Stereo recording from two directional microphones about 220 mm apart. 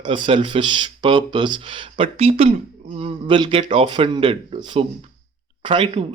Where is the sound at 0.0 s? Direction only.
20° right (ahead or behind).